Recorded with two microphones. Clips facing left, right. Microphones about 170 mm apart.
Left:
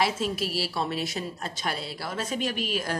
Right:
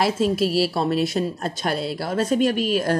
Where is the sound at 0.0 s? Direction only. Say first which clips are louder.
Right 7 dB; 35° right (ahead or behind).